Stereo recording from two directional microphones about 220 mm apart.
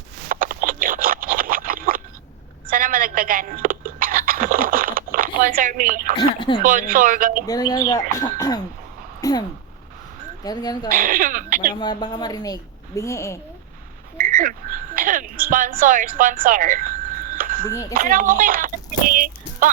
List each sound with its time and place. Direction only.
0.3 s a sound: 40° right (ahead or behind)
6.1 s speech: 20° left (ahead or behind)
6.6 s speech: 40° right (ahead or behind)
7.4 s a woman's voice: 15° left (ahead or behind)
10.4 s a woman's voice: 20° left (ahead or behind)
10.9 s speech: 40° right (ahead or behind)
11.8 s a woman's voice: 20° left (ahead or behind)
14.2 s a sound: 40° right (ahead or behind)
15.8 s a woman's voice: 40° right (ahead or behind)
17.7 s a woman's voice: 15° left (ahead or behind)
17.9 s speech: 40° right (ahead or behind)
19.1 s a sound: 40° right (ahead or behind)